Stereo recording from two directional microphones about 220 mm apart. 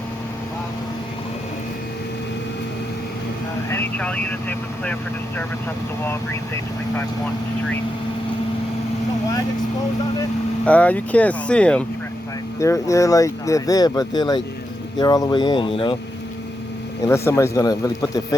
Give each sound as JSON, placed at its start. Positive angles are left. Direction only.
{"t": 3.7, "sound": "speech", "side_deg": 10}
{"t": 10.7, "sound": "speech", "side_deg": 5}
{"t": 17.0, "sound": "speech", "side_deg": 10}